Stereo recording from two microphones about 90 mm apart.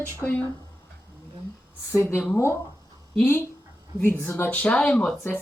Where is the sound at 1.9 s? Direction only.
20° left (ahead or behind).